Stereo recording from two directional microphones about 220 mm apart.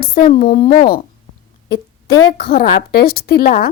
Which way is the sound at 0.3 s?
40° left (ahead or behind).